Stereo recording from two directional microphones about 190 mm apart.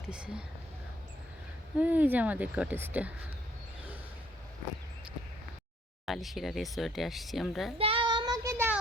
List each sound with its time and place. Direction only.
0.1 s speech: 5° right (ahead or behind)
1.8 s speech: 10° right (ahead or behind)
6.1 s speech: centre (ahead or behind)
7.8 s child singing: 30° right (ahead or behind)